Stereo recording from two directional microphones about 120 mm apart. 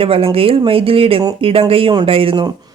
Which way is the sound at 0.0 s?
50° right (ahead or behind).